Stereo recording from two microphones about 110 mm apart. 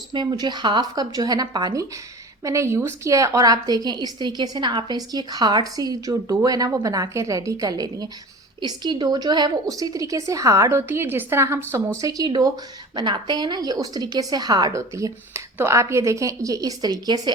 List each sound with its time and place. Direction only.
0.1 s a woman's voice: 40° right (ahead or behind); by 11.8 s 25° right (ahead or behind)
11.9 s a woman's voice: 35° right (ahead or behind)